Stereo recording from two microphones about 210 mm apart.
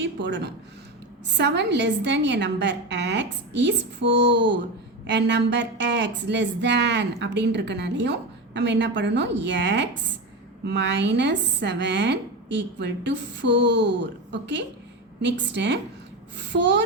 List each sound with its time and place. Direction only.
0.0 s a woman's voice: 60° right (ahead or behind)